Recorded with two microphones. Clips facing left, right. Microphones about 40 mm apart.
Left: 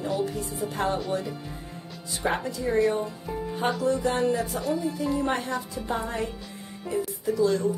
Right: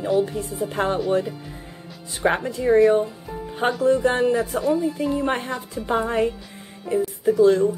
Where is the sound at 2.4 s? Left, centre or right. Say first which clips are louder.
Right 8 dB; right.